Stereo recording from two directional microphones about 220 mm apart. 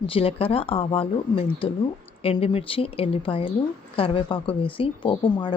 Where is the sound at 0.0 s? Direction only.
25° left (ahead or behind).